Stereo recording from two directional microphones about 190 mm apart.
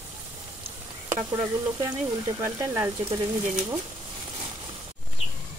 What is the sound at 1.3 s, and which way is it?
Speech, 20° right (ahead or behind).